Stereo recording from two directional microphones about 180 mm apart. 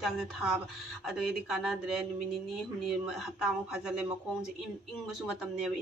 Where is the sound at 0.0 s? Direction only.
Centre (ahead or behind).